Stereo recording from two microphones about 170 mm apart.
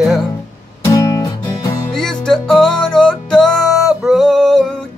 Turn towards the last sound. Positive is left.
turn(degrees=5)  # may be behind; listen again after turning